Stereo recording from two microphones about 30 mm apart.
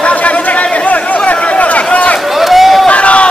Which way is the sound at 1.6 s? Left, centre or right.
Left.